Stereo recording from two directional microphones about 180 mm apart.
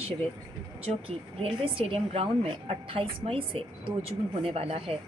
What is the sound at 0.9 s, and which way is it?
A woman's voice, 30° right (ahead or behind).